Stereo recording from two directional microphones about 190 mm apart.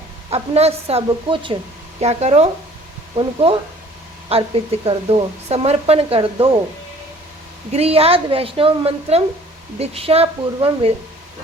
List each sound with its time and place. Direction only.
0.3 s speech: 35° right (ahead or behind)
4.3 s speech: 30° right (ahead or behind)
7.7 s speech: 30° right (ahead or behind)